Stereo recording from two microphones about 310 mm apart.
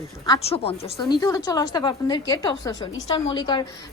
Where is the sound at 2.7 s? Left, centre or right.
Left.